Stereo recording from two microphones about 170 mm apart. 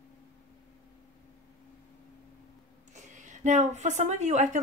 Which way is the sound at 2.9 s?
45° right (ahead or behind).